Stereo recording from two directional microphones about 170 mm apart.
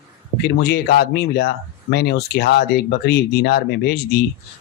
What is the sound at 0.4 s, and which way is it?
Speech, 70° left (ahead or behind).